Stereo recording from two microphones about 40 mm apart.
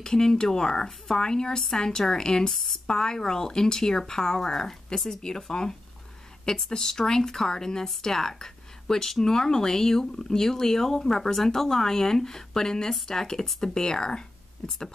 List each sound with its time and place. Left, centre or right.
0.0 s speech: centre